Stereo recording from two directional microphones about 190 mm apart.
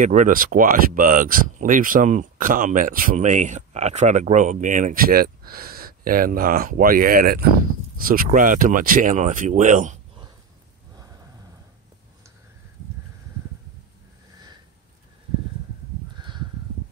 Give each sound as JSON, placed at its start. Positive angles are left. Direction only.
{"t": 0.0, "sound": "speech", "side_deg": -40}
{"t": 16.2, "sound": "crow", "side_deg": -25}